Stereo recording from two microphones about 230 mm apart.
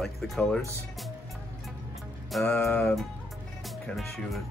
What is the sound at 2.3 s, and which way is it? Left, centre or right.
Speech, centre.